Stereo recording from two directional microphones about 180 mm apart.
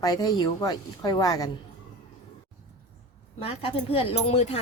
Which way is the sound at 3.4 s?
30° left (ahead or behind).